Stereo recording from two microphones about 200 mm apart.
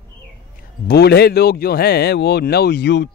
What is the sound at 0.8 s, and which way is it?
Speech, 55° left (ahead or behind).